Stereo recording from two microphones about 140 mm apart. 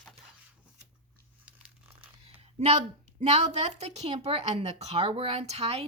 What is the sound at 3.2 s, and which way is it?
Speech, 50° right (ahead or behind).